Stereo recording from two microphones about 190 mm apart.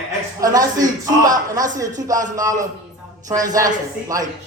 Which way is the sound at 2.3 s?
20° right (ahead or behind).